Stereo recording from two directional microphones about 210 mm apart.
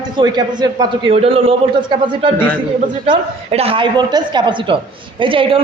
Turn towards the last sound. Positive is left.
turn(degrees=-25)  # may be behind; listen again after turning